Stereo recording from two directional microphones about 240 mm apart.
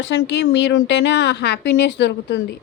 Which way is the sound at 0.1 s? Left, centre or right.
Left.